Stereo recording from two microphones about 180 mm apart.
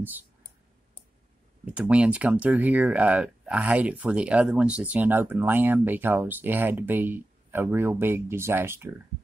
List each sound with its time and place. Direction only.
1.7 s speech: 5° right (ahead or behind)